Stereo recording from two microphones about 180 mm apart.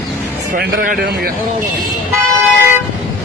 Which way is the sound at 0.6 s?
60° right (ahead or behind).